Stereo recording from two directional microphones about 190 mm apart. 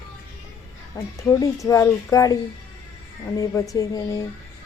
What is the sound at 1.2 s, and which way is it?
Speech, 15° left (ahead or behind).